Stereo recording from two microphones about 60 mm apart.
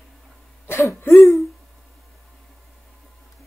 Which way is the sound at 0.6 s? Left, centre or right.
Left.